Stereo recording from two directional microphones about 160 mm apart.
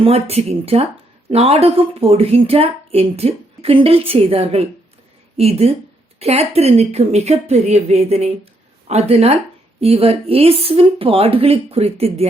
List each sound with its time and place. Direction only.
0.0 s a woman's voice: 40° right (ahead or behind)